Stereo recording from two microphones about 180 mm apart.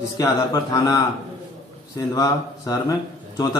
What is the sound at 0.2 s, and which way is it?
Speech, 20° left (ahead or behind).